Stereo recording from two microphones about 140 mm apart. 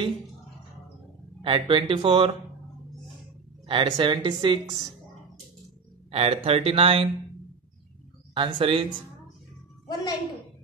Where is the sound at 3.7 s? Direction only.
35° right (ahead or behind).